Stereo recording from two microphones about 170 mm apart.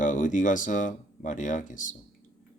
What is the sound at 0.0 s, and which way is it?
Speech, 50° left (ahead or behind).